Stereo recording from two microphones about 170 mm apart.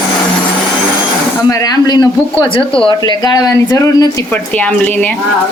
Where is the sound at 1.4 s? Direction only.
20° left (ahead or behind).